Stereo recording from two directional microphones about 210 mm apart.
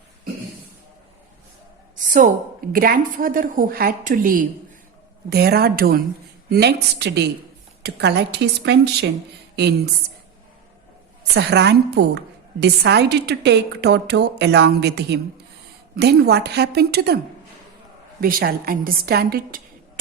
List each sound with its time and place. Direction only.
2.7 s a woman's voice: 45° right (ahead or behind)
11.3 s a woman's voice: 55° right (ahead or behind)
18.2 s a woman's voice: 45° right (ahead or behind)